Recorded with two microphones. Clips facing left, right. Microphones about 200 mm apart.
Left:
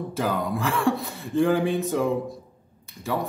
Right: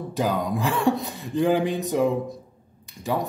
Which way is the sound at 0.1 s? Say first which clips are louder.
Right 3 dB; 15° right (ahead or behind).